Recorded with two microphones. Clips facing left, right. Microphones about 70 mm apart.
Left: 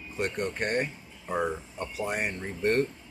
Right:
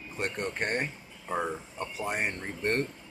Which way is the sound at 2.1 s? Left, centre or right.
Right.